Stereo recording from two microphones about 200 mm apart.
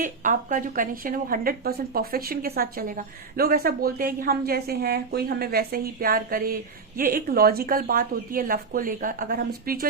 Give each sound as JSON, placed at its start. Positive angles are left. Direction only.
{"t": 0.0, "sound": "speech", "side_deg": -40}